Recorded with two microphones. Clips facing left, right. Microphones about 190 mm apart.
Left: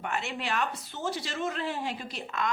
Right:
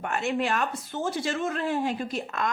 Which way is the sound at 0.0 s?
45° right (ahead or behind).